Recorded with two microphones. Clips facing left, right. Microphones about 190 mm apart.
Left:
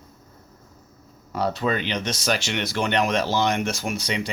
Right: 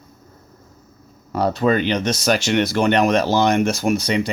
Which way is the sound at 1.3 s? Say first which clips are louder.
Right 6 dB; 45° right (ahead or behind).